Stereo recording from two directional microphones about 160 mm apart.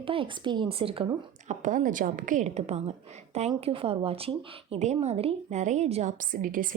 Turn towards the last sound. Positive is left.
turn(degrees=-60)  # may be behind; listen again after turning